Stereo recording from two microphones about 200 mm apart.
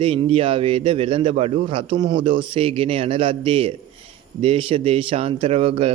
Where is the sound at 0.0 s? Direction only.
25° right (ahead or behind).